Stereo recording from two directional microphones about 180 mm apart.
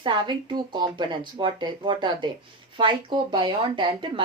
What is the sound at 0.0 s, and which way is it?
Speech, 25° right (ahead or behind).